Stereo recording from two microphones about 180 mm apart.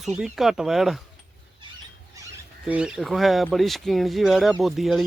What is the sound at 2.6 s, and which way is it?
Speech, 5° right (ahead or behind).